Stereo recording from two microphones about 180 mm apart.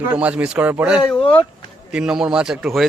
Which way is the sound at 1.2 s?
30° left (ahead or behind).